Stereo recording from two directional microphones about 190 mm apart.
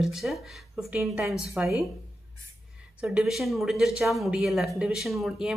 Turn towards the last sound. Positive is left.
turn(degrees=0)  # may be behind; listen again after turning